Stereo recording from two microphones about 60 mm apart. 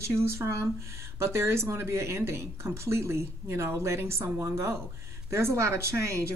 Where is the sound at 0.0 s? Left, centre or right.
Right.